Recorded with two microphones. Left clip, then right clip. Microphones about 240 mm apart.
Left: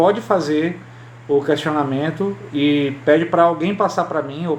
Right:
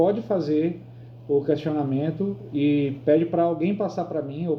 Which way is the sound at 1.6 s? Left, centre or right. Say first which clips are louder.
Left 6 dB; left.